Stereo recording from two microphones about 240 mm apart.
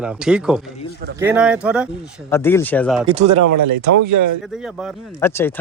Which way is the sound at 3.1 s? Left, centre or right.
Right.